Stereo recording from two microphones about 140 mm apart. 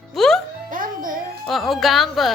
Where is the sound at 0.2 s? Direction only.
Centre (ahead or behind).